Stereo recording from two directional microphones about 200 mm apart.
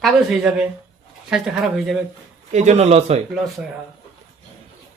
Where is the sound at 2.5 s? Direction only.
35° right (ahead or behind).